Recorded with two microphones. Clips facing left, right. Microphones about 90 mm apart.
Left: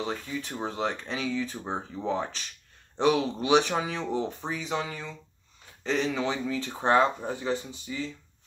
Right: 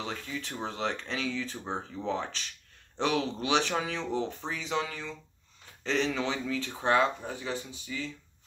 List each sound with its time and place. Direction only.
0.0 s speech: 10° left (ahead or behind)
6.8 s speech: 30° left (ahead or behind)